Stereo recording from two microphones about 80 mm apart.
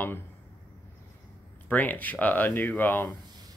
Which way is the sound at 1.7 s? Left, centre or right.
Left.